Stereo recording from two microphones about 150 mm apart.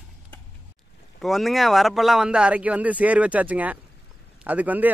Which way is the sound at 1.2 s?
Centre (ahead or behind).